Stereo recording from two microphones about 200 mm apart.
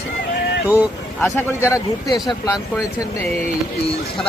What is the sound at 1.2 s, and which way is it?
Speech, 15° left (ahead or behind).